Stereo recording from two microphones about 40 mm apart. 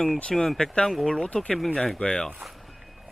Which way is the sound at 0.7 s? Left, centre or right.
Centre.